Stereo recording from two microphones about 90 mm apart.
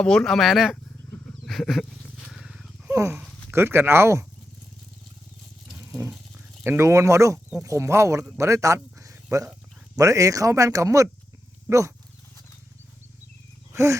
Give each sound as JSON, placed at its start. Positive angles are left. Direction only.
{"t": 0.0, "sound": "speech", "side_deg": 10}
{"t": 1.5, "sound": "wild animals", "side_deg": 0}
{"t": 2.9, "sound": "speech", "side_deg": -35}
{"t": 5.8, "sound": "dog", "side_deg": -35}
{"t": 6.7, "sound": "a man's voice", "side_deg": -30}